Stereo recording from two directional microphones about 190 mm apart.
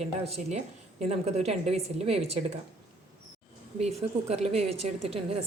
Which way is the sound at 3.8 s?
35° right (ahead or behind).